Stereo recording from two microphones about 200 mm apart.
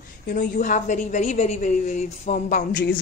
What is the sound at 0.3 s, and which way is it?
A woman's voice, 40° left (ahead or behind).